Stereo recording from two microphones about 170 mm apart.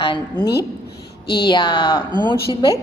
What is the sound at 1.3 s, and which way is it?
A woman's voice, 25° left (ahead or behind).